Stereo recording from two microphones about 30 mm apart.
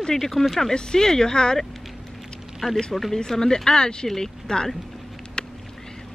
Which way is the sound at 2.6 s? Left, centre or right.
Left.